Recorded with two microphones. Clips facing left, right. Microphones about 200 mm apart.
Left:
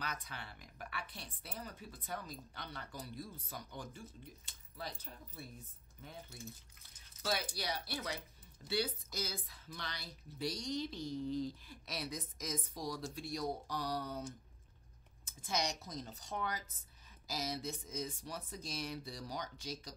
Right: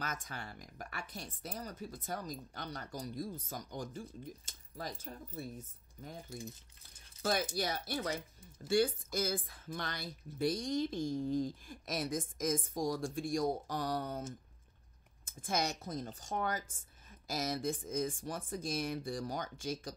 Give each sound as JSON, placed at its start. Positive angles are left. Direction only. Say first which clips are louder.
{"t": 0.0, "sound": "speech", "louder": "right 3 dB", "side_deg": -45}
{"t": 7.2, "sound": "speech", "louder": "right 5 dB", "side_deg": -45}
{"t": 15.2, "sound": "speech", "louder": "right 3 dB", "side_deg": -50}